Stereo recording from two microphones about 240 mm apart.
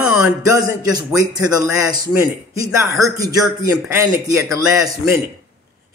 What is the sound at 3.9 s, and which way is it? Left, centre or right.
Speech, centre.